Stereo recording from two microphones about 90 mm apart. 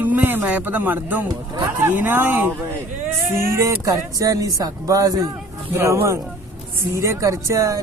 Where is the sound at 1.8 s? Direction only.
25° right (ahead or behind); by 5.3 s 45° right (ahead or behind).